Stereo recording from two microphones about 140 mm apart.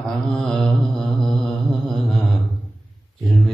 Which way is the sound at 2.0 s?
Centre (ahead or behind).